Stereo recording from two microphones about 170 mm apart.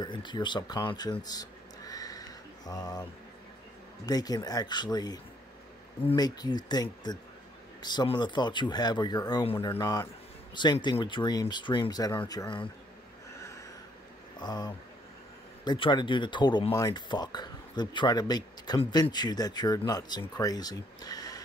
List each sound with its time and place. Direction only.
0.0 s speech: 25° left (ahead or behind)
9.7 s speech: 20° left (ahead or behind)
14.4 s speech: 25° left (ahead or behind)